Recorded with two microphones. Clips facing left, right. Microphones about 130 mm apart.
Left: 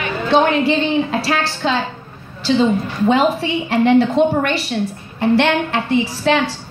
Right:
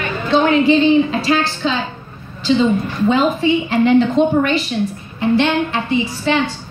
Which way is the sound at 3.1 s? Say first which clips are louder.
Right 1 dB; 65° left (ahead or behind).